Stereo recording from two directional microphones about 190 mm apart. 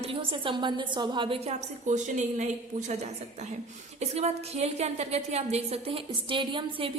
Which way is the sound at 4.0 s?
35° right (ahead or behind).